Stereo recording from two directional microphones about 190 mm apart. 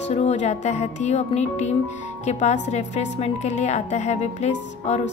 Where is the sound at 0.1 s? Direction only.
35° left (ahead or behind).